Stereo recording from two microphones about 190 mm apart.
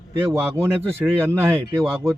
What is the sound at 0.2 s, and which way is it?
Speech, 10° right (ahead or behind).